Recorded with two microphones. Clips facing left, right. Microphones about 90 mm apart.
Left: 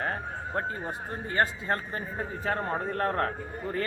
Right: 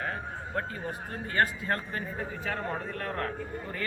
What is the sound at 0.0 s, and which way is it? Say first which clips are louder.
Speech: left 3 dB; 35° left (ahead or behind).